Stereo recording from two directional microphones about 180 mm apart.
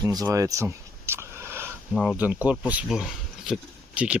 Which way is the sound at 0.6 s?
15° right (ahead or behind).